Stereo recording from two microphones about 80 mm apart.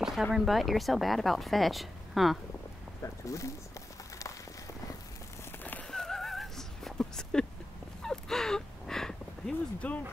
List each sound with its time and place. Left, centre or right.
0.0 s speech: centre
3.0 s speech: left
5.6 s horse: left
5.9 s a sound: centre